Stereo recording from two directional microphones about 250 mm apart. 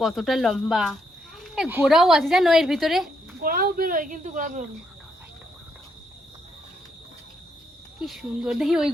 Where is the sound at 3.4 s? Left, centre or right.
Right.